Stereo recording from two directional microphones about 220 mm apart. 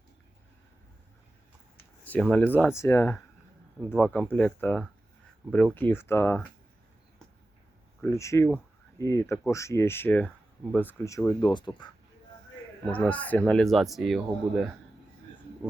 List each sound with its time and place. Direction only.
1.8 s a sound: 10° left (ahead or behind)
2.3 s speech: 10° left (ahead or behind)
8.0 s speech: 15° left (ahead or behind)
12.8 s speech: 5° left (ahead or behind)